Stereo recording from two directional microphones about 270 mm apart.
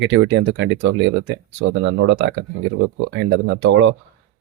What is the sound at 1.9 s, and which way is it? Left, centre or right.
Speech, right.